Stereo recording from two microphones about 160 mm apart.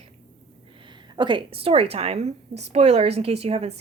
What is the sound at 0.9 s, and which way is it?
A woman's voice, 30° right (ahead or behind).